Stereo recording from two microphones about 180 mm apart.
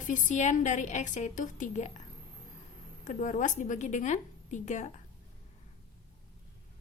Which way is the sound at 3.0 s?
45° left (ahead or behind).